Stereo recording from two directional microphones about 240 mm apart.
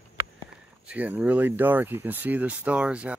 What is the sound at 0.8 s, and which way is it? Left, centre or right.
Speech, centre.